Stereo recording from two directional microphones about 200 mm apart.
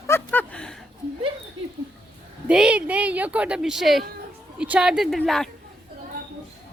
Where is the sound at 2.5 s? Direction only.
5° right (ahead or behind).